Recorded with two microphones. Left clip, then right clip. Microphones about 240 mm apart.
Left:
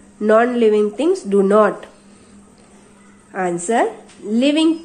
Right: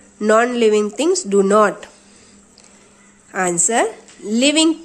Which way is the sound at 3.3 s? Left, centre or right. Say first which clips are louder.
Right 1 dB; right.